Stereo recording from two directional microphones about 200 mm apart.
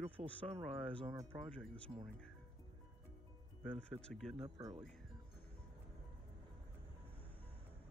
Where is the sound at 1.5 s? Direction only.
5° left (ahead or behind).